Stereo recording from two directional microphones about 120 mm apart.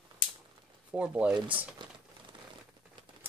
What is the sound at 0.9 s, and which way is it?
Speech, 10° right (ahead or behind).